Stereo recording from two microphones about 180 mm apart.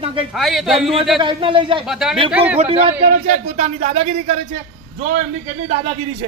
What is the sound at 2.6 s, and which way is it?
Speech, 30° right (ahead or behind).